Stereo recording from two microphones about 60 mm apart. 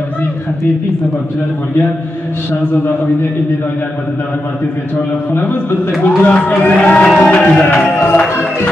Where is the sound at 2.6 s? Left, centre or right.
Left.